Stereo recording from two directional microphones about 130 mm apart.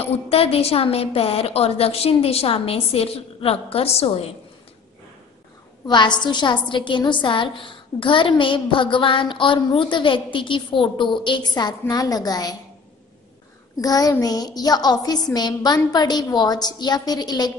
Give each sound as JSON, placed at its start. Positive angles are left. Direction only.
{"t": 0.0, "sound": "a woman's voice", "side_deg": 50}
{"t": 5.9, "sound": "a woman's voice", "side_deg": 35}
{"t": 13.7, "sound": "a woman's voice", "side_deg": 30}